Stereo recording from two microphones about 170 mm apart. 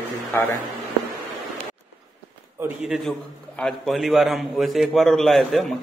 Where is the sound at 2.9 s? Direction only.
Centre (ahead or behind).